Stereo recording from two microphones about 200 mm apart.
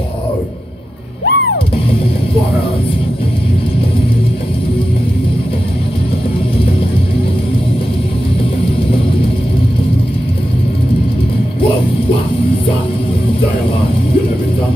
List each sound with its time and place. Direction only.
1.2 s music: 65° left (ahead or behind)